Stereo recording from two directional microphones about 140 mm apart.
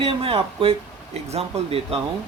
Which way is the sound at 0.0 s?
40° right (ahead or behind).